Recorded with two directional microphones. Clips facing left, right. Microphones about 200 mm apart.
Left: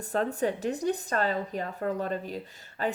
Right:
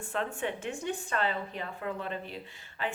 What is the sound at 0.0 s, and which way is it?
Speech, 40° left (ahead or behind).